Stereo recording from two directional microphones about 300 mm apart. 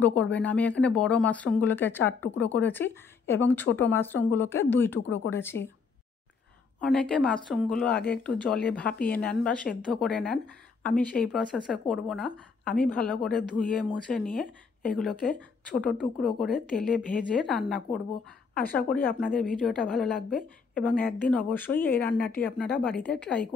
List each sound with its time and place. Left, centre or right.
0.0 s speech: centre
5.0 s speech: left
5.3 s speech: centre
6.8 s speech: centre